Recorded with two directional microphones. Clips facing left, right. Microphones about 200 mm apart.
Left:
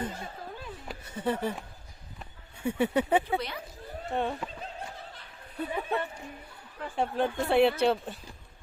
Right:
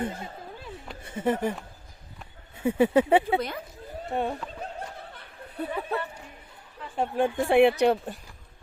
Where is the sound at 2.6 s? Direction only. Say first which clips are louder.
Right 6 dB; 90° right.